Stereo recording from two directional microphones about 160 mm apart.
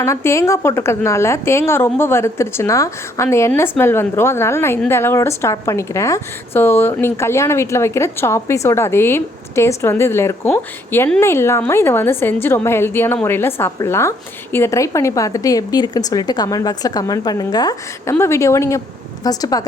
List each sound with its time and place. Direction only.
0.0 s a woman's voice: 15° left (ahead or behind)